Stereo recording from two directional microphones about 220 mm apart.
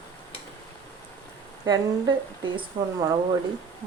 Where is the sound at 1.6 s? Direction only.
15° right (ahead or behind).